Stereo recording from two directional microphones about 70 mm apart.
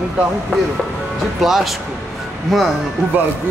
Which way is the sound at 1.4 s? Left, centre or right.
Centre.